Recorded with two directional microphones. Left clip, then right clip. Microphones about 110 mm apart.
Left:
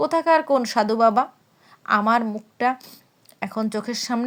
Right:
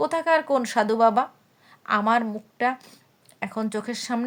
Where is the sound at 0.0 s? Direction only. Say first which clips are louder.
Left 3 dB; 25° left (ahead or behind).